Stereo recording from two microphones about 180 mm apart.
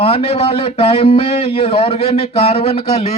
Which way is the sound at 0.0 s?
35° left (ahead or behind).